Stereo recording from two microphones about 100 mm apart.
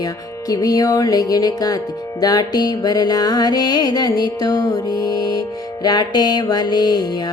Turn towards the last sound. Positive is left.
turn(degrees=45)  # may be behind; listen again after turning